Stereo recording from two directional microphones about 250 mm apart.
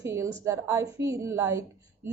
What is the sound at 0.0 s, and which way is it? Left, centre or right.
A woman's voice, centre.